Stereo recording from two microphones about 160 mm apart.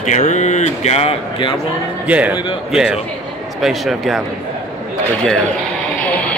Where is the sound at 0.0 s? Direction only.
45° left (ahead or behind).